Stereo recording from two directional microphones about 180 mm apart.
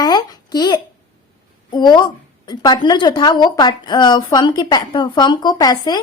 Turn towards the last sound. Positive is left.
turn(degrees=20)  # may be behind; listen again after turning